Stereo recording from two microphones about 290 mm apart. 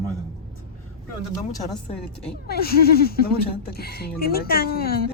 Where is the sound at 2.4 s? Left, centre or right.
Left.